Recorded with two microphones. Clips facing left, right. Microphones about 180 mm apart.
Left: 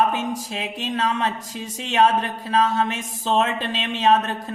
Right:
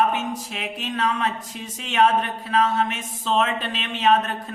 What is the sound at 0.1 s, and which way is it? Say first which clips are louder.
Speech: left 1 dB; 30° left (ahead or behind).